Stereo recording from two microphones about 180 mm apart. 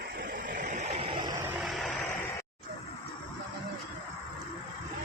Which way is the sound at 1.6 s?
Centre (ahead or behind).